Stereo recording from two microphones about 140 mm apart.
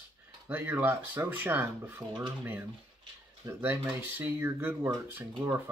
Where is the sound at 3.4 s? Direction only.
15° right (ahead or behind).